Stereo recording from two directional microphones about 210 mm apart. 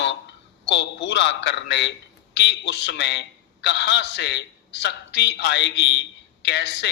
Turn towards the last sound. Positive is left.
turn(degrees=55)  # may be behind; listen again after turning